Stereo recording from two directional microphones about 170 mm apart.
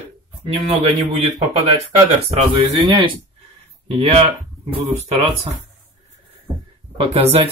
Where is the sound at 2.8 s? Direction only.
25° right (ahead or behind).